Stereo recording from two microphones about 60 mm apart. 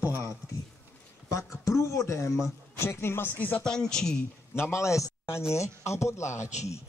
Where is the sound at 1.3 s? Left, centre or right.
Left.